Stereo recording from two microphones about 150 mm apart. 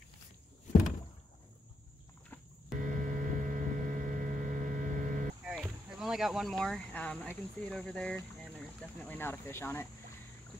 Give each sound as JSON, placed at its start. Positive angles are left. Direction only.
{"t": 2.8, "sound": "vehicle", "side_deg": -60}
{"t": 5.4, "sound": "speech", "side_deg": 0}